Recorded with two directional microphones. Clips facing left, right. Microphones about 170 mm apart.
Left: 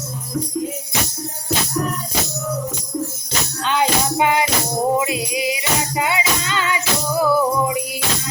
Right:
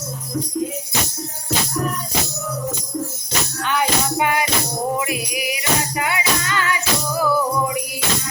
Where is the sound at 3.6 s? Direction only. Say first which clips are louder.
Left 2 dB; 20° left (ahead or behind).